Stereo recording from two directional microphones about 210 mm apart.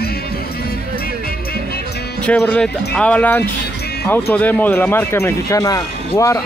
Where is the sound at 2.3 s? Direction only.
5° left (ahead or behind).